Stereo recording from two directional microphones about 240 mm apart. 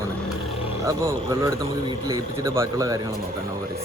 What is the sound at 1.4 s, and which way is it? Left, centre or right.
Speech, centre.